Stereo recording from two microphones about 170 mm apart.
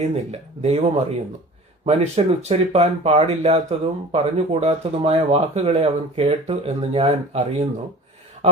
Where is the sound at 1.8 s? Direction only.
35° right (ahead or behind).